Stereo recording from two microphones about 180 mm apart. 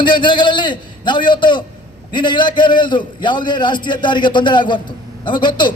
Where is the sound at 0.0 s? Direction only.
25° left (ahead or behind).